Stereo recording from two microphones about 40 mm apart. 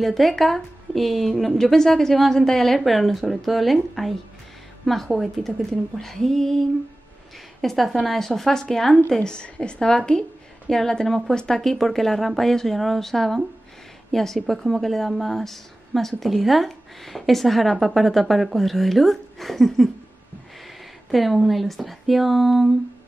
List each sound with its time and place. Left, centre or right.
0.0 s speech: centre
7.6 s speech: centre
9.2 s a woman's voice: left; by 19.9 s centre
21.1 s speech: centre